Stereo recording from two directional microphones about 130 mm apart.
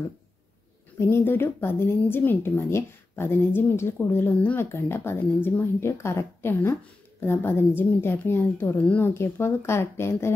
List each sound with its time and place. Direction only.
0.9 s speech: 20° left (ahead or behind)